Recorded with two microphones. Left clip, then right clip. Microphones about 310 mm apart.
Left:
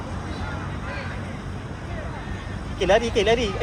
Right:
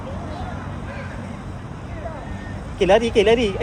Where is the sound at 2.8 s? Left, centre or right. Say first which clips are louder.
Right 4 dB; right.